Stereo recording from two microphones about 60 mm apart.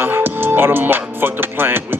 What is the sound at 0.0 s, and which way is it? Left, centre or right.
Music, right.